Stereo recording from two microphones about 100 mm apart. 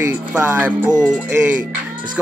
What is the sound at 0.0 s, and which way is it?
Speech, 20° right (ahead or behind).